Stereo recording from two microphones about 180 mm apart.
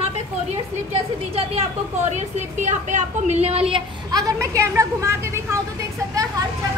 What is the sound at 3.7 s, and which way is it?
A woman's voice, 20° right (ahead or behind).